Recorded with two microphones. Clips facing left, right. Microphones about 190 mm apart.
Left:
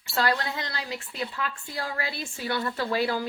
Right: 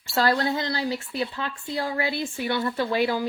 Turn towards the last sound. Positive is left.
turn(degrees=-20)  # may be behind; listen again after turning